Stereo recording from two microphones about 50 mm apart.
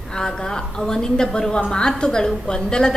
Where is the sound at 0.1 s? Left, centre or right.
Centre.